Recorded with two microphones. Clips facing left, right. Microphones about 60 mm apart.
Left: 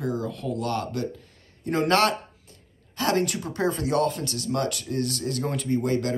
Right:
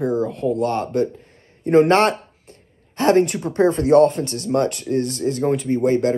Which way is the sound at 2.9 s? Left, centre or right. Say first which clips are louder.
Right 8 dB; right.